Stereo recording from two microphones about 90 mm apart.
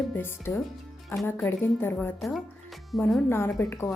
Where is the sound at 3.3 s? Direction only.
25° left (ahead or behind).